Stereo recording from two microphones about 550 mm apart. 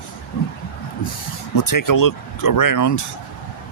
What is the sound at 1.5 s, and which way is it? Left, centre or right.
Speech, left.